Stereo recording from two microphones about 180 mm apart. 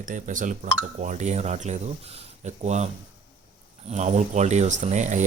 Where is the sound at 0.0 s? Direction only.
45° right (ahead or behind).